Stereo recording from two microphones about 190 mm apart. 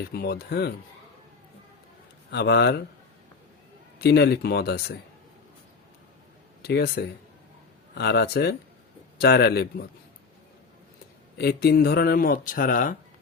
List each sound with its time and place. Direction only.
0.1 s speech: 55° left (ahead or behind)
2.3 s speech: 60° left (ahead or behind)
3.9 s speech: 60° left (ahead or behind)
6.6 s speech: 55° left (ahead or behind)
11.3 s speech: 55° left (ahead or behind)